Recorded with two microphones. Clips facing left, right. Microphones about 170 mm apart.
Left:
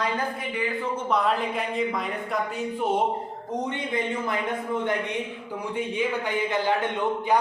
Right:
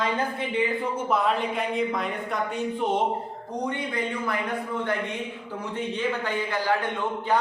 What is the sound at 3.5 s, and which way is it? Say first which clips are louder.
Speech: left 1 dB; 20° left (ahead or behind).